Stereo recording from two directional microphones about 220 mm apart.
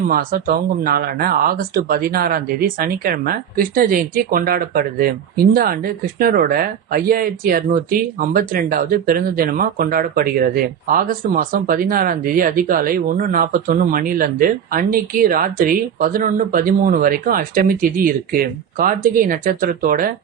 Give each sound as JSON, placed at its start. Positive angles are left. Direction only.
{"t": 0.1, "sound": "speech", "side_deg": -40}